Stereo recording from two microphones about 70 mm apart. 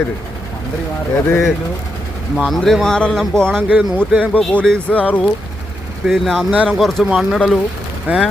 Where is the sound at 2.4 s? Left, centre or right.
Centre; by 5.2 s left.